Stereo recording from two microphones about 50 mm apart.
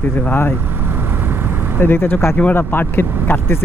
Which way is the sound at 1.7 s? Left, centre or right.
Left.